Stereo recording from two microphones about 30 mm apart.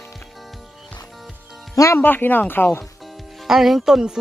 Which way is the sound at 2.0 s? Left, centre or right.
Left.